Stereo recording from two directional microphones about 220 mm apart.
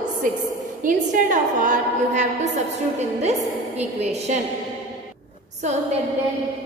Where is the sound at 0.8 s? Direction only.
35° right (ahead or behind).